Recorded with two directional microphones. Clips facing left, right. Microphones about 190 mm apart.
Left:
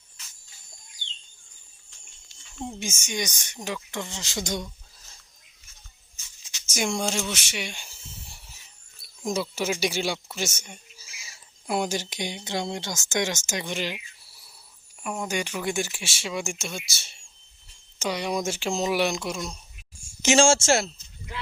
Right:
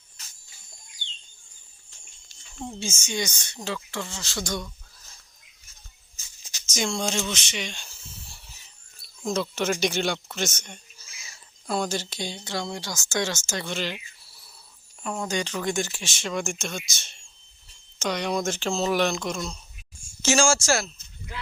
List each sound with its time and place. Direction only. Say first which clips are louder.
2.6 s speech: right 1 dB; 15° left (ahead or behind)
6.7 s speech: even; 15° left (ahead or behind)
9.8 s a sound: right 1 dB; 5° left (ahead or behind)
11.7 s speech: left 1 dB; 15° left (ahead or behind)
15.0 s speech: right 1 dB; 15° left (ahead or behind)
20.2 s speech: left 3 dB; 25° left (ahead or behind)